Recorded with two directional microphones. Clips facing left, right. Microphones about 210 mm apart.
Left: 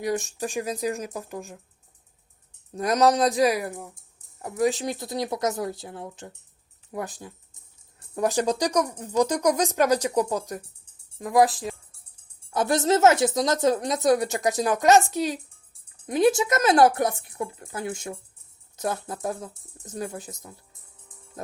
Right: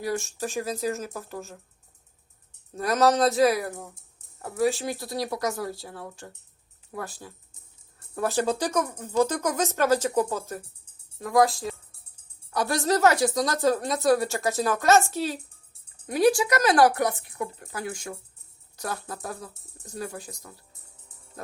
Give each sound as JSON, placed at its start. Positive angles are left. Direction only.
{"t": 0.0, "sound": "speech", "side_deg": 20}
{"t": 2.7, "sound": "speech", "side_deg": 15}